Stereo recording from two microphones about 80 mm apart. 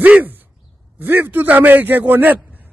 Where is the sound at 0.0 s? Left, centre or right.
Right.